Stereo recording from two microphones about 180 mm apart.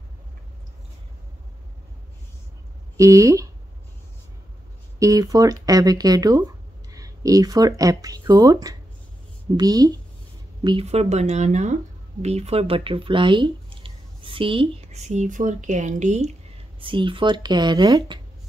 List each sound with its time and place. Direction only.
3.0 s speech: 15° right (ahead or behind)
4.9 s speech: 20° right (ahead or behind); by 16.3 s 40° right (ahead or behind)
16.8 s speech: 30° right (ahead or behind)